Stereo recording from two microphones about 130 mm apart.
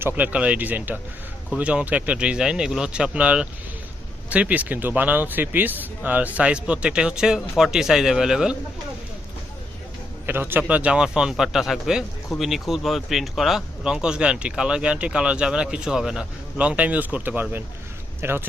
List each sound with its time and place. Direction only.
0.0 s a man's voice: 10° right (ahead or behind)
10.2 s a man's voice: 15° right (ahead or behind)